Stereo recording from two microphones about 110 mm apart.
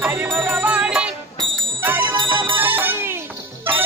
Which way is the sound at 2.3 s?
15° right (ahead or behind).